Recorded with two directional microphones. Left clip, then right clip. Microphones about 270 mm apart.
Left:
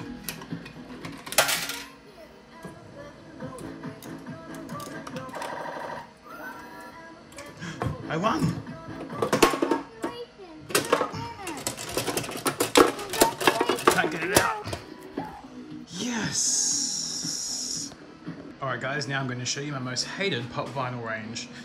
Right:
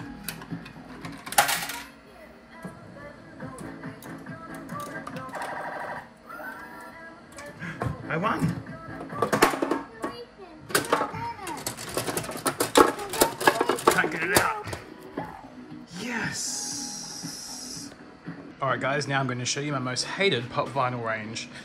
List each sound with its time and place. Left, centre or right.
5.0 s music: centre
7.6 s a sound: centre
9.2 s music: centre
10.7 s typewriter: centre
15.9 s music: centre
16.8 s music: centre
17.3 s music: centre
18.6 s speech: centre